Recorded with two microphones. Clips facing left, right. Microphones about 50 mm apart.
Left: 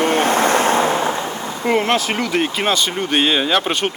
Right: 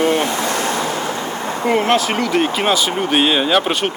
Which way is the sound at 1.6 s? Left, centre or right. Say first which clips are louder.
Right 1 dB; centre.